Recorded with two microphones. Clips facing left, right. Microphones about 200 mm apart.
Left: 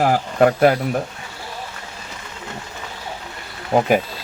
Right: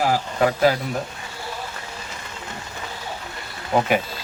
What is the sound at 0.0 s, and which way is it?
Speech, 55° left (ahead or behind).